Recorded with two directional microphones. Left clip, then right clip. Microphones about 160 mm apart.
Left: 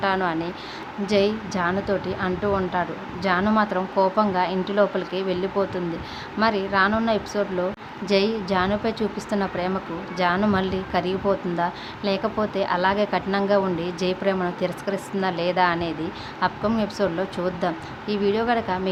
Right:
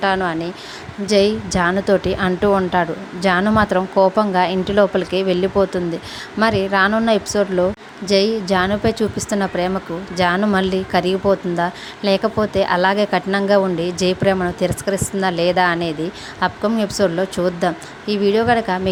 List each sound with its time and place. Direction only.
0.0 s speech: 40° right (ahead or behind)
8.0 s speech: 35° right (ahead or behind)